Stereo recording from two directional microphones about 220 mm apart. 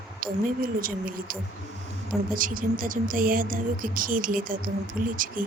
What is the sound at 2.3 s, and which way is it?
Speech, 40° right (ahead or behind).